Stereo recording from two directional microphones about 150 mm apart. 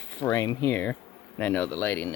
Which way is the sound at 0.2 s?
20° left (ahead or behind).